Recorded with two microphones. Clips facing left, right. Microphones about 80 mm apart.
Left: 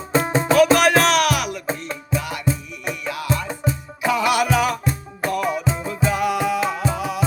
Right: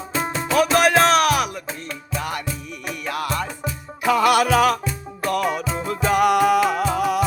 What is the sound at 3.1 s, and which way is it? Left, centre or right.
Music, right.